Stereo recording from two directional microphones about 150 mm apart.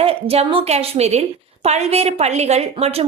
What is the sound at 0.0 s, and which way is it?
A woman's voice, 40° right (ahead or behind).